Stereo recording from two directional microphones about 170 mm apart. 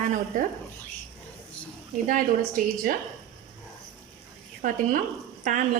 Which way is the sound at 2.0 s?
55° right (ahead or behind).